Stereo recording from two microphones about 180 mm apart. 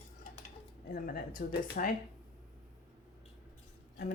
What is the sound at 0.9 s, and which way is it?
Speech, 55° left (ahead or behind).